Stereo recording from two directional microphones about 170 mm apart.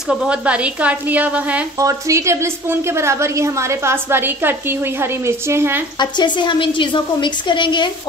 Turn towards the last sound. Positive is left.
turn(degrees=25)  # may be behind; listen again after turning